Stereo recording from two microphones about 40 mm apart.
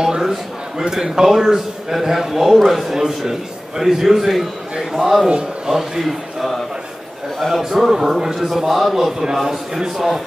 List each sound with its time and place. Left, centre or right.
0.0 s a man's voice: centre
7.9 s a man's voice: centre